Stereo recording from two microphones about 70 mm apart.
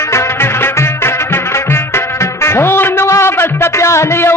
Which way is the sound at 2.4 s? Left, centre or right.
Left.